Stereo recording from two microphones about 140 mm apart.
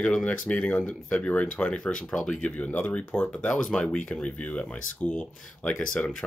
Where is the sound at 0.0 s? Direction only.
5° left (ahead or behind).